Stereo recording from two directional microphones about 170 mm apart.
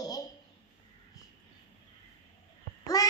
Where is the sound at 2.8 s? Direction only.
20° left (ahead or behind).